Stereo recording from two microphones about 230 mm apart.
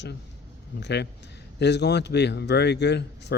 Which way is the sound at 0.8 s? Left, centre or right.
Left.